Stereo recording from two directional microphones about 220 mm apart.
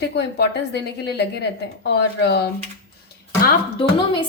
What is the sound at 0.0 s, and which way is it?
A woman's voice, 50° left (ahead or behind).